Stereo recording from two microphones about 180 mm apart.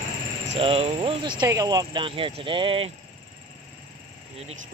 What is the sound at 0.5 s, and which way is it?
Speech, 35° right (ahead or behind).